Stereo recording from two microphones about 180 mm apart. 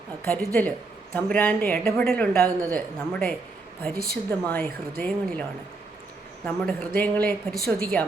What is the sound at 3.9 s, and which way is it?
Speech, 60° right (ahead or behind).